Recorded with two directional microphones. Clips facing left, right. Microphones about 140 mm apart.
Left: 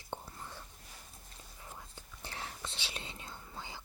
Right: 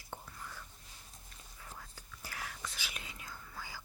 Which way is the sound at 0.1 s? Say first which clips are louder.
Left 3 dB; 30° left (ahead or behind).